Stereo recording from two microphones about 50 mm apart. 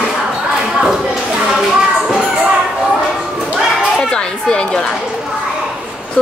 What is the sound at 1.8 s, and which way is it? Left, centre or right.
Children playing, centre.